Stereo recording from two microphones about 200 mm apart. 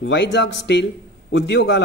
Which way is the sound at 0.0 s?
60° left (ahead or behind).